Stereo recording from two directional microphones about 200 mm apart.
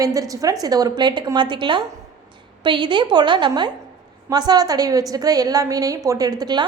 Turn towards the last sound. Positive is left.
turn(degrees=-20)  # may be behind; listen again after turning